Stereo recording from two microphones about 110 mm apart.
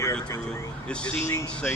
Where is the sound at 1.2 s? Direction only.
25° left (ahead or behind).